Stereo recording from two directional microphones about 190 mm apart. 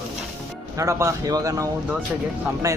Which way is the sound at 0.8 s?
15° right (ahead or behind).